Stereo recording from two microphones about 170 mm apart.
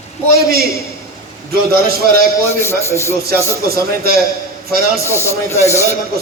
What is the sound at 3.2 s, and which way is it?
Speech, 65° right (ahead or behind).